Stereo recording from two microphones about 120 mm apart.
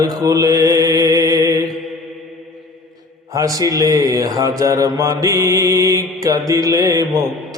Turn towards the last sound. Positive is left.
turn(degrees=-30)  # may be behind; listen again after turning